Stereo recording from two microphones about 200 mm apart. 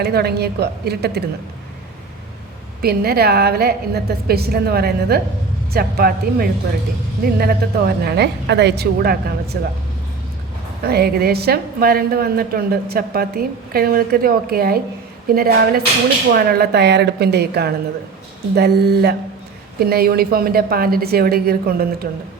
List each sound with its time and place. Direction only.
0.0 s a woman's voice: 55° right (ahead or behind)
2.8 s a woman's voice: 50° right (ahead or behind)
10.8 s a woman's voice: 50° right (ahead or behind)